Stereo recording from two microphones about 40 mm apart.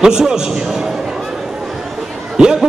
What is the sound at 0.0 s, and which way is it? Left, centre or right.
Speech, centre.